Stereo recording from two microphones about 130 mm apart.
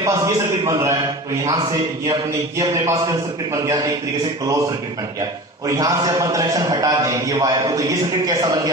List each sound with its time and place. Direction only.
0.0 s a man's voice: 25° right (ahead or behind)
5.7 s a man's voice: 25° right (ahead or behind)